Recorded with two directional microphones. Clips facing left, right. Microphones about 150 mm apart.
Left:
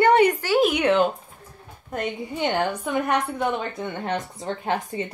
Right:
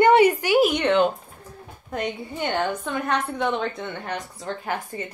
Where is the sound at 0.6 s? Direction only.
5° left (ahead or behind).